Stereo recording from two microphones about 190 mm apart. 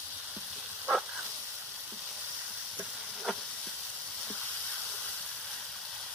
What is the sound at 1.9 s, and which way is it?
Frying, 5° right (ahead or behind).